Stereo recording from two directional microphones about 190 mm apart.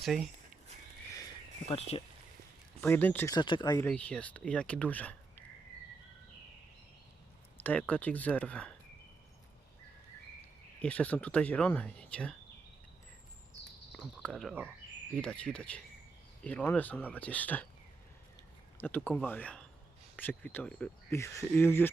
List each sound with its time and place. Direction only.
0.0 s speech: centre (ahead or behind)
2.8 s speech: 10° left (ahead or behind)
3.3 s speech: 25° left (ahead or behind)
3.8 s speech: 10° left (ahead or behind)
7.6 s speech: 10° left (ahead or behind)
10.8 s speech: 10° left (ahead or behind)
13.9 s speech: 5° left (ahead or behind)
18.8 s speech: 10° left (ahead or behind)